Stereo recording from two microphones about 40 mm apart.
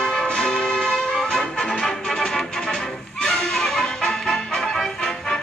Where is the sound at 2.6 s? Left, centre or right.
Left.